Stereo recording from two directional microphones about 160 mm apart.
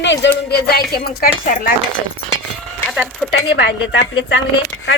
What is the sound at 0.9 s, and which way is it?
Speech, 70° left (ahead or behind).